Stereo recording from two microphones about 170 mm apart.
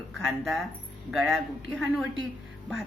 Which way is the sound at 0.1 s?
Centre (ahead or behind).